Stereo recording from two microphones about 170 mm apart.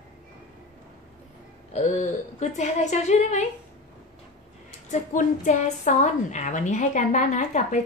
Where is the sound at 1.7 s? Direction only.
45° left (ahead or behind).